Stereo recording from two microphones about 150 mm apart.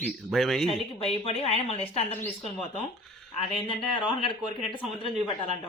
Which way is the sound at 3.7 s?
35° left (ahead or behind).